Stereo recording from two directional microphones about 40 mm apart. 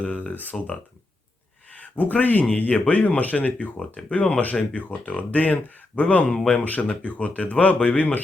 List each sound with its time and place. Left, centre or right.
0.0 s speech: left
1.7 s speech: left
2.4 s speech: left
3.8 s speech: left
6.2 s speech: centre
6.5 s speech: left